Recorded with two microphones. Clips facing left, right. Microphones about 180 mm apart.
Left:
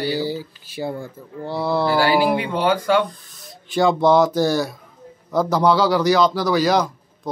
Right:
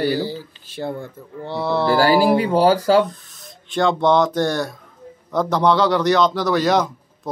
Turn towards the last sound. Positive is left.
turn(degrees=0)  # may be behind; listen again after turning